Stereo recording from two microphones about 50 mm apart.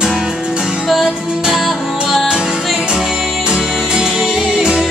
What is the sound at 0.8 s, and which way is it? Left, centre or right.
Music, centre.